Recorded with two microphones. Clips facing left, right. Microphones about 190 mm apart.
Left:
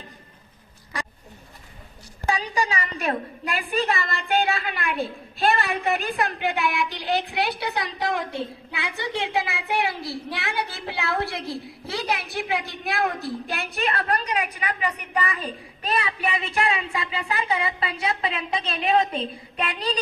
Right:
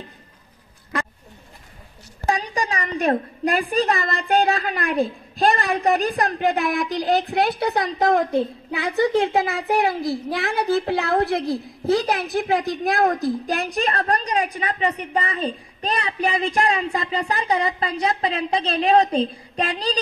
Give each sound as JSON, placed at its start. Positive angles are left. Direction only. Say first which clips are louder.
{"t": 2.2, "sound": "a woman's voice", "louder": "right 2 dB", "side_deg": -35}
{"t": 10.0, "sound": "a woman's voice", "louder": "right 7 dB", "side_deg": 0}
{"t": 10.9, "sound": "a woman's voice", "louder": "right 7 dB", "side_deg": -40}